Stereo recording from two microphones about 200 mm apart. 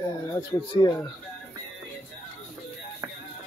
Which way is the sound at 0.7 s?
20° left (ahead or behind).